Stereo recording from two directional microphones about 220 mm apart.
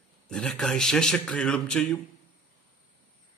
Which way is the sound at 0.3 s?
5° left (ahead or behind).